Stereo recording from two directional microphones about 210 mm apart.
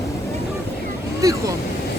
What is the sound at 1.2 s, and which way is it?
Vehicle, 15° right (ahead or behind).